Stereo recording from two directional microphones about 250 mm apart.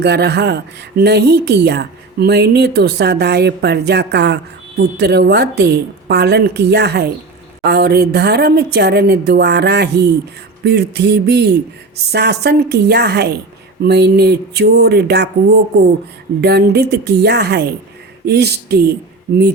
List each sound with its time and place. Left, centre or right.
0.0 s speech: right